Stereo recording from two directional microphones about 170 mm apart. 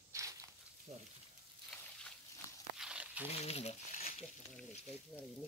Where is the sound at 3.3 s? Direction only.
40° left (ahead or behind).